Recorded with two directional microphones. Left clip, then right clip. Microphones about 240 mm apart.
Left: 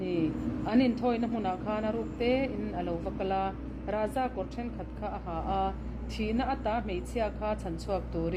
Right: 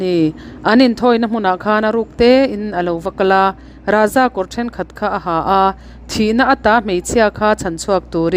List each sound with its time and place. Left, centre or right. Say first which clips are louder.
0.0 s speech: right 15 dB; right